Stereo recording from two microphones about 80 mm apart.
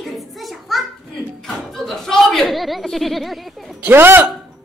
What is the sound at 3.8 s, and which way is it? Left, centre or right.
Speech, right.